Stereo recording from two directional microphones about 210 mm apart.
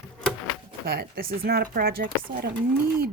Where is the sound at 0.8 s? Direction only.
45° right (ahead or behind).